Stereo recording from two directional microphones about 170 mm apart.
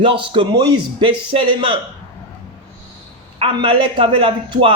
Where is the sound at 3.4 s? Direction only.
30° right (ahead or behind).